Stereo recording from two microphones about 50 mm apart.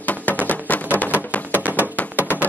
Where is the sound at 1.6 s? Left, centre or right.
Right.